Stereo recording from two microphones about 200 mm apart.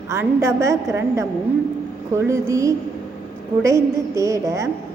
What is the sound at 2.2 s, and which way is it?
A woman's voice, 15° right (ahead or behind).